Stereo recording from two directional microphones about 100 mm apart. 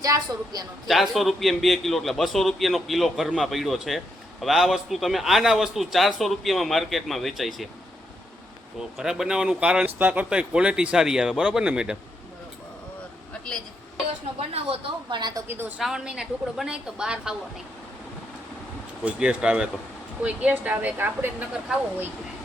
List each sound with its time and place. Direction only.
0.0 s a woman's voice: 35° right (ahead or behind)
0.9 s a man's voice: centre (ahead or behind)
8.8 s speech: 5° right (ahead or behind)
14.3 s speech: 90° right
15.1 s a woman's voice: 50° right (ahead or behind)
15.4 s a woman's voice: 20° right (ahead or behind)
15.8 s a man's voice: 5° right (ahead or behind)
19.0 s speech: 10° right (ahead or behind)